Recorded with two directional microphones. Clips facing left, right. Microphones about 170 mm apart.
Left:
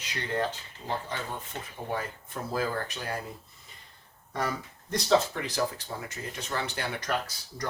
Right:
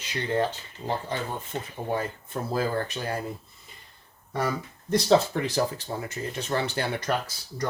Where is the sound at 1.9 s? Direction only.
30° right (ahead or behind).